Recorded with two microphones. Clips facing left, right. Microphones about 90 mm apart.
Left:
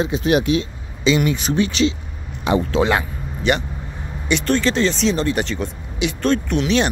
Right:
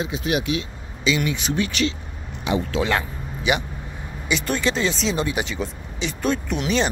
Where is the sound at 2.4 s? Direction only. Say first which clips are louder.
Left 5 dB; 45° left (ahead or behind).